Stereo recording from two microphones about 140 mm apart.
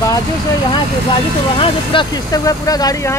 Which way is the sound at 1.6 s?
35° left (ahead or behind).